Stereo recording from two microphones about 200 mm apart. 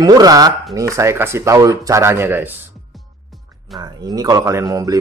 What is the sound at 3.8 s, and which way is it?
Speech, 20° right (ahead or behind).